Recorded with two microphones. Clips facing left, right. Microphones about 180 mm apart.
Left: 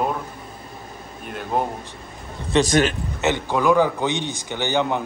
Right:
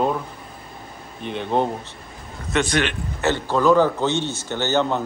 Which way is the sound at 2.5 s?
40° left (ahead or behind).